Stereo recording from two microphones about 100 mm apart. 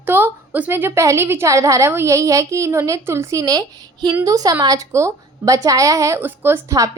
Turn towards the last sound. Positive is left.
turn(degrees=-20)  # may be behind; listen again after turning